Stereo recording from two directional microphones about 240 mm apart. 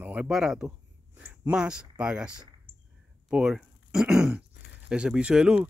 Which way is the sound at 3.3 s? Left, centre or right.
Centre.